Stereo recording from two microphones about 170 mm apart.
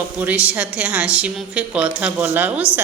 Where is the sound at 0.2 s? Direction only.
10° right (ahead or behind).